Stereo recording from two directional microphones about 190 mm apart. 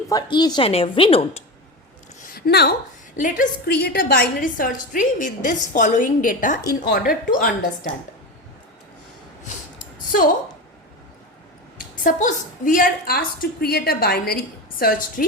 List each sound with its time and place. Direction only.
0.1 s a woman's voice: 20° left (ahead or behind)
2.2 s a sound: 55° left (ahead or behind)
3.2 s a woman's voice: 45° left (ahead or behind)
3.7 s a woman's voice: 60° left (ahead or behind)
12.0 s a woman's voice: 45° left (ahead or behind)